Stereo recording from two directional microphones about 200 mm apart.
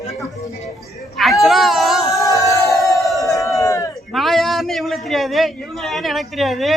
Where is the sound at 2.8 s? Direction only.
15° left (ahead or behind).